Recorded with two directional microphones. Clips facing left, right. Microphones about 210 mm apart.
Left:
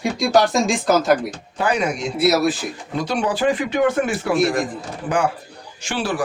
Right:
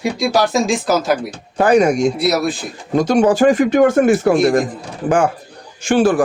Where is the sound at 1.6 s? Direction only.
45° right (ahead or behind).